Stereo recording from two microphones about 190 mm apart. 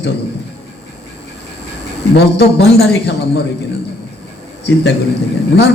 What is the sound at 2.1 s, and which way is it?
A man's voice, 60° left (ahead or behind).